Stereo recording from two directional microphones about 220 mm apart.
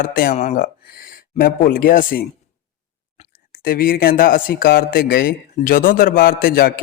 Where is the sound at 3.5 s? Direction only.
40° left (ahead or behind).